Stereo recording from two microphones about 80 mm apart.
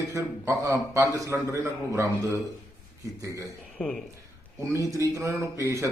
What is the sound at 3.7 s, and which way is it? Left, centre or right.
Speech, centre.